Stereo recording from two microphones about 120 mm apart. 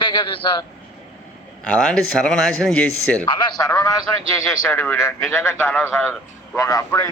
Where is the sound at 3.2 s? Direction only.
40° left (ahead or behind).